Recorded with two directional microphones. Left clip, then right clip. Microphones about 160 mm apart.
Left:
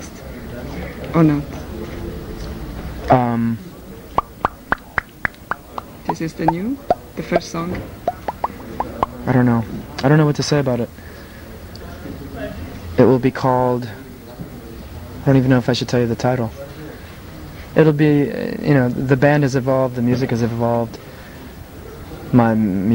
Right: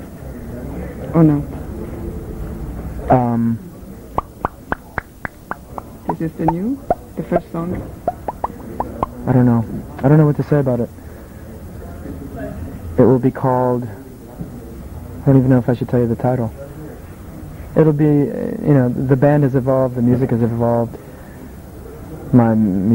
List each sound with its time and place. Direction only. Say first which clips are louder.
1.1 s a man's voice: right 1 dB; 25° left (ahead or behind)
3.1 s a sound: even; 30° left (ahead or behind)
6.4 s speech: even; 25° left (ahead or behind)
12.9 s a man's voice: even; 30° left (ahead or behind)
15.2 s a man's voice: right 1 dB; 30° left (ahead or behind)
17.7 s speech: even; 30° left (ahead or behind)
22.3 s speech: right 1 dB; 25° left (ahead or behind)